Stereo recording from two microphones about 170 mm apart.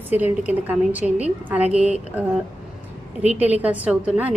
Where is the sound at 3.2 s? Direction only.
10° right (ahead or behind).